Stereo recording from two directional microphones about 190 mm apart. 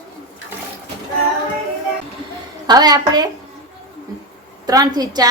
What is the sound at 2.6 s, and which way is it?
Speech, 20° right (ahead or behind).